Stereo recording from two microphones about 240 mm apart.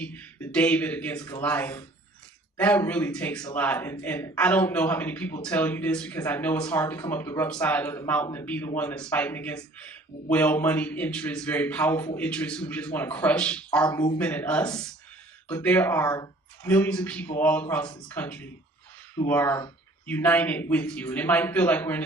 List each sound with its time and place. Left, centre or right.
0.0 s a man's voice: centre
13.8 s a man's voice: centre
14.2 s a man's voice: centre